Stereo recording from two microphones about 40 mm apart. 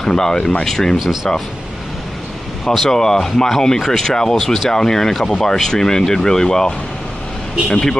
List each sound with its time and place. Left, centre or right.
0.0 s speech: centre
0.9 s speech: centre
2.9 s speech: centre
7.7 s speech: centre